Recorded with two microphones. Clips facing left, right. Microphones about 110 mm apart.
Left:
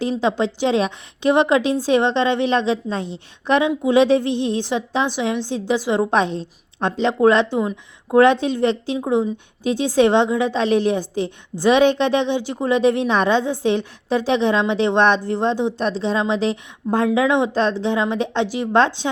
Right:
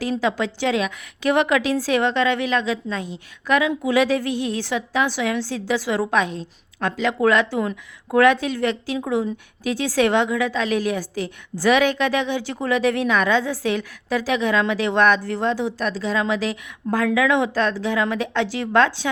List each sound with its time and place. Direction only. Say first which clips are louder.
0.0 s a woman's voice: left 3 dB; 25° left (ahead or behind)